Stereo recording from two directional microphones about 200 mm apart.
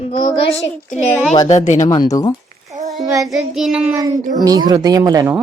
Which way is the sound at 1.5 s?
35° left (ahead or behind).